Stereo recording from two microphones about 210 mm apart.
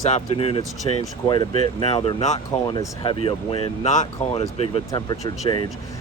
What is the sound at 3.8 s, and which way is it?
Speech, 35° left (ahead or behind).